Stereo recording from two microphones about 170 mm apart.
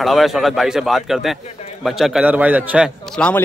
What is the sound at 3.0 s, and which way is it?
Speech, 5° left (ahead or behind).